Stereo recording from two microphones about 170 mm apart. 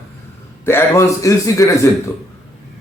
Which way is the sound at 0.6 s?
15° left (ahead or behind).